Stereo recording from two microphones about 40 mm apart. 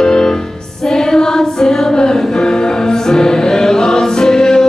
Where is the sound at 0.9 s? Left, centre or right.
Centre.